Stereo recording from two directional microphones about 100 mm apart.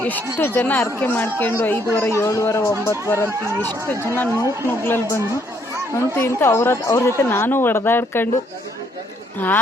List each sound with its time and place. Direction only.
0.0 s speech: 20° left (ahead or behind)
3.8 s speech: 20° left (ahead or behind)